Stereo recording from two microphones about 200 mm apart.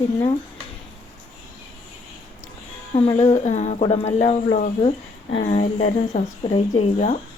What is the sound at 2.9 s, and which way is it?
Speech, 30° left (ahead or behind).